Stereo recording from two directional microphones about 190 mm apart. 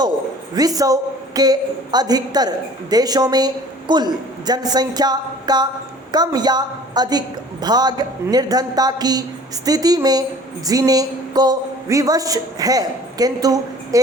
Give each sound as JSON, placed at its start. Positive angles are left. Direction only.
{"t": 0.5, "sound": "a woman's voice", "side_deg": -20}